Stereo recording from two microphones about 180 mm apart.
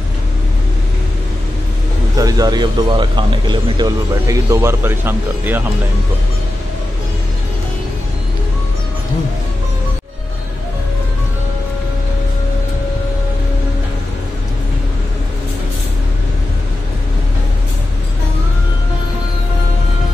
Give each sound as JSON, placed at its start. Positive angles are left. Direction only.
{"t": 2.1, "sound": "a man's voice", "side_deg": -20}